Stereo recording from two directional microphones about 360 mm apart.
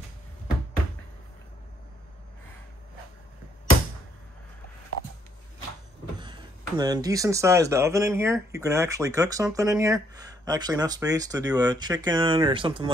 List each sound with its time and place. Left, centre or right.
6.1 s speech: centre